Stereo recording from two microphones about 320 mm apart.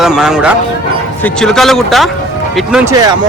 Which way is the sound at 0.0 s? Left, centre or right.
Centre.